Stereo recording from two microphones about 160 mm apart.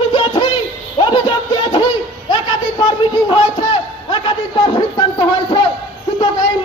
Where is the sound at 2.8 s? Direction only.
30° left (ahead or behind).